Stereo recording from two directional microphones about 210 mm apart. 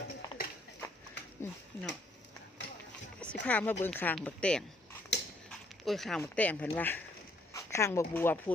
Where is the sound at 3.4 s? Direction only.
5° left (ahead or behind).